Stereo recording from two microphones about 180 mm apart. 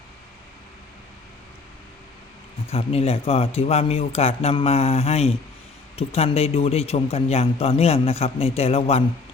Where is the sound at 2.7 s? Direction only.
35° left (ahead or behind).